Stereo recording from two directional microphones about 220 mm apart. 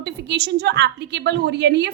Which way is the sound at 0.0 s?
50° right (ahead or behind).